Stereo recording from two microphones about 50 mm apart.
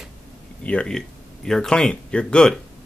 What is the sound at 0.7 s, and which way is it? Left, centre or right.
Speech, left.